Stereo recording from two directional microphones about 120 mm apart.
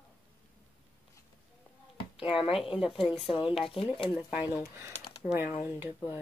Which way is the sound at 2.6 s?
5° right (ahead or behind).